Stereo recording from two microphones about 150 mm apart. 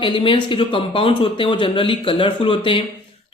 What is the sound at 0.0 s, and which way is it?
Speech, 35° left (ahead or behind).